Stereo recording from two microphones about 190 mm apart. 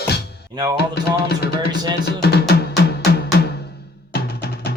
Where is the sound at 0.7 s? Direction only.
60° left (ahead or behind).